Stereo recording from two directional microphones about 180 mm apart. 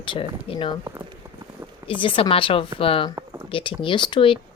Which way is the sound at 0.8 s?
20° right (ahead or behind).